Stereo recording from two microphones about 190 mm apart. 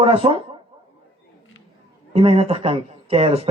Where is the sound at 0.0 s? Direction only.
30° right (ahead or behind).